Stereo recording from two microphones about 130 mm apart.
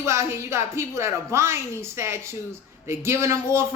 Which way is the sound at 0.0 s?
20° right (ahead or behind).